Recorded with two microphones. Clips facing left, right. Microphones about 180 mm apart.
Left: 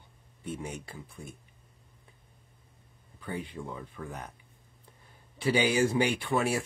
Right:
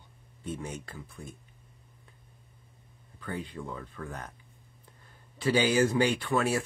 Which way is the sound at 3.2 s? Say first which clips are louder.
Even; 15° left (ahead or behind).